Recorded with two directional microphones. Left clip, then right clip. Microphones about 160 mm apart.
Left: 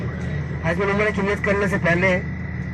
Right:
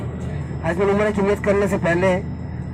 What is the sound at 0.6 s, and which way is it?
A man's voice, 45° right (ahead or behind).